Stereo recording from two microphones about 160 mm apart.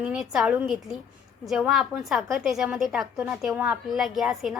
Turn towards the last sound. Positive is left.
turn(degrees=0)  # may be behind; listen again after turning